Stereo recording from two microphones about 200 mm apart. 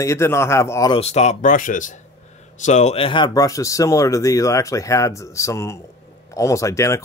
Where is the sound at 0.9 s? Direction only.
30° left (ahead or behind).